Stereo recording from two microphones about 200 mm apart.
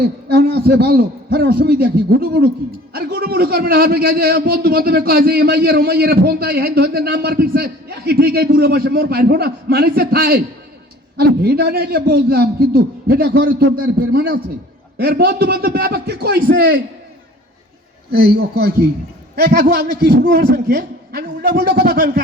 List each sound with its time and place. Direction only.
0.0 s a man's voice: 50° right (ahead or behind)
18.1 s a man's voice: 50° right (ahead or behind)